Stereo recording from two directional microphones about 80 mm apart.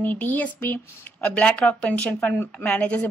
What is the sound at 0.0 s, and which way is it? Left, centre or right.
A woman's voice, left.